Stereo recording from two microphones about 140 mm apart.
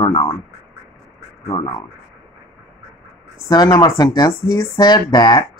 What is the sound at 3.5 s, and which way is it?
Speech, 30° left (ahead or behind).